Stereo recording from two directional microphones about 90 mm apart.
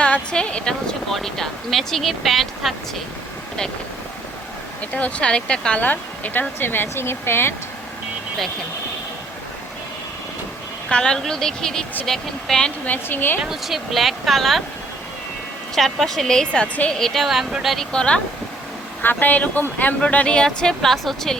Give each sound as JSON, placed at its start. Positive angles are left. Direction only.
{"t": 0.0, "sound": "speech", "side_deg": 10}
{"t": 4.9, "sound": "speech", "side_deg": 15}
{"t": 10.8, "sound": "speech", "side_deg": 10}
{"t": 13.4, "sound": "speech", "side_deg": -5}
{"t": 15.7, "sound": "speech", "side_deg": 0}
{"t": 17.0, "sound": "speech", "side_deg": 0}